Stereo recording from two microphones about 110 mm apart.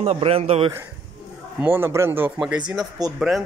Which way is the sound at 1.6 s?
20° right (ahead or behind).